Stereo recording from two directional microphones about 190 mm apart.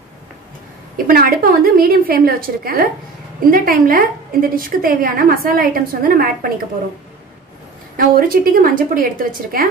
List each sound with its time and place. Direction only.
0.9 s a woman's voice: 50° right (ahead or behind)
8.0 s a woman's voice: 50° right (ahead or behind)